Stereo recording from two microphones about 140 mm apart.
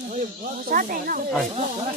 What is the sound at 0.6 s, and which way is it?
Speech, 85° right.